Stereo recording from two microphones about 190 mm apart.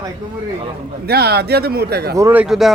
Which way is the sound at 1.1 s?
55° right (ahead or behind).